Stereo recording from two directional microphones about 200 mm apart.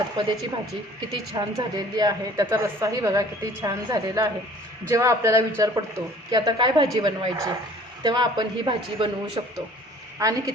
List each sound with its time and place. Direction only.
1.3 s a woman's voice: 20° right (ahead or behind)